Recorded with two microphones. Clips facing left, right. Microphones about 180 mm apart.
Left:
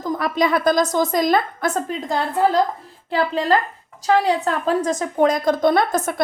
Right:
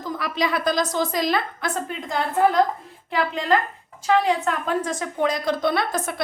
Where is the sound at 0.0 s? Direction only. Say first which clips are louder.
Left 5 dB; 50° left (ahead or behind).